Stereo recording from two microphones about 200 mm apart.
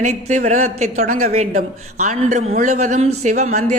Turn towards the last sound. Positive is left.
turn(degrees=-35)  # may be behind; listen again after turning